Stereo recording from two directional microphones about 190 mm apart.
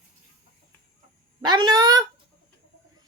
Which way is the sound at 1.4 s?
20° right (ahead or behind).